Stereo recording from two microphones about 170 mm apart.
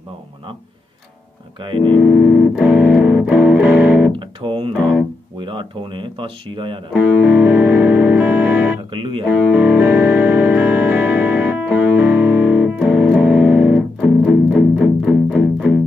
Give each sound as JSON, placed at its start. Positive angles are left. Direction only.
{"t": 1.8, "sound": "music", "side_deg": 0}
{"t": 4.2, "sound": "music", "side_deg": -30}
{"t": 5.4, "sound": "speech", "side_deg": -30}
{"t": 6.9, "sound": "music", "side_deg": -10}
{"t": 8.9, "sound": "speech", "side_deg": -30}
{"t": 9.5, "sound": "music", "side_deg": -10}